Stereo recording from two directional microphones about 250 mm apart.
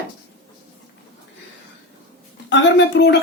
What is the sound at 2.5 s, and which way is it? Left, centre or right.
Speech, left.